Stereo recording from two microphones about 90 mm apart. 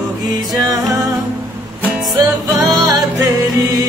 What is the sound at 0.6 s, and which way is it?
Music, 45° right (ahead or behind).